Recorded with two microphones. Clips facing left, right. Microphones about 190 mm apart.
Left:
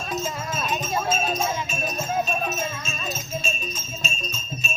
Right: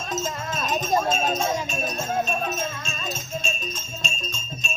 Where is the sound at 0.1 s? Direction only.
10° left (ahead or behind).